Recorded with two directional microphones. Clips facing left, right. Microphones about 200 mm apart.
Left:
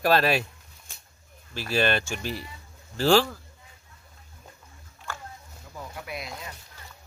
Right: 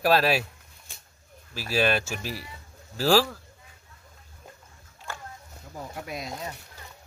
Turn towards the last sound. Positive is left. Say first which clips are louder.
# right 2 dB
turn(degrees=-40)  # may be behind; listen again after turning